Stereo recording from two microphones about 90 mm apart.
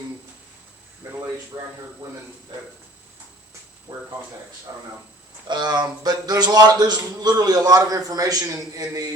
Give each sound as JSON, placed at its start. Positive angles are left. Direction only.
{"t": 3.9, "sound": "speech", "side_deg": -60}
{"t": 4.7, "sound": "speech", "side_deg": -35}
{"t": 5.5, "sound": "a man's voice", "side_deg": -50}